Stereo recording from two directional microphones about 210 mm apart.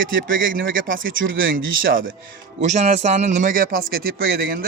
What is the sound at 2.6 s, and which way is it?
A man's voice, 30° right (ahead or behind).